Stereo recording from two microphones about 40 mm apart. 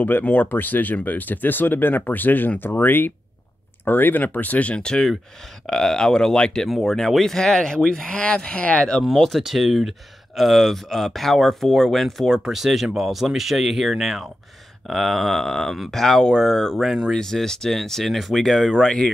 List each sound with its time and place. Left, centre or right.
0.2 s speech: left
4.8 s speech: centre
6.7 s speech: centre
8.1 s speech: left
9.0 s speech: centre
9.4 s speech: centre
12.3 s speech: centre
15.4 s speech: centre
16.7 s speech: centre
17.1 s speech: centre